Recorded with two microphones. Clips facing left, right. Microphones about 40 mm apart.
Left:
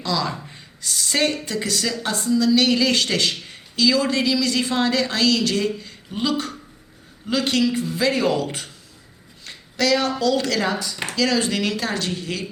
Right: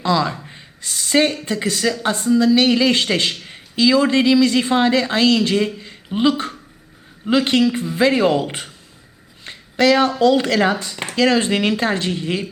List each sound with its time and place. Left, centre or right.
0.0 s a woman's voice: right
9.5 s a sound: right
10.2 s speech: right